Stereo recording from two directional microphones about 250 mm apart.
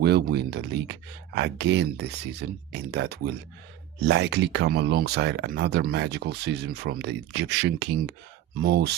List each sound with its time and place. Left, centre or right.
0.0 s speech: right